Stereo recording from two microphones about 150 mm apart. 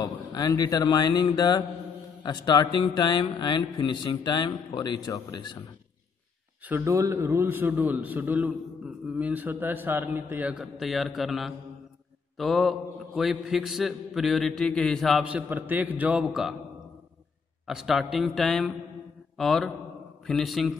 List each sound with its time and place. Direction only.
0.3 s speech: 25° left (ahead or behind)
6.6 s a man's voice: 15° right (ahead or behind); by 15.2 s centre (ahead or behind)
15.2 s a man's voice: 10° right (ahead or behind)
17.6 s a man's voice: centre (ahead or behind)